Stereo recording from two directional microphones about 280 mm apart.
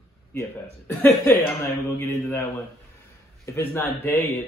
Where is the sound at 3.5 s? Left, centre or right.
Centre.